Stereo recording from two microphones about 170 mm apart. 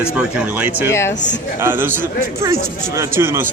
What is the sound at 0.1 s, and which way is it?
Speech, 5° right (ahead or behind).